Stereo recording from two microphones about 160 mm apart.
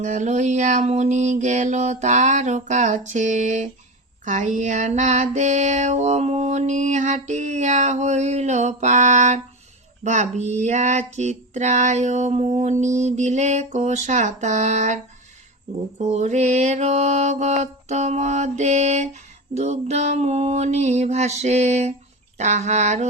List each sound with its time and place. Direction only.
0.0 s mantra: 50° right (ahead or behind)
16.0 s mantra: 45° right (ahead or behind)